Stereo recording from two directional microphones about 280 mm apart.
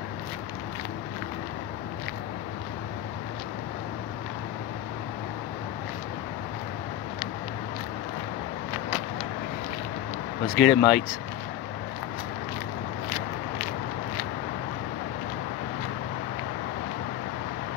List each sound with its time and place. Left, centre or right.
10.5 s speech: centre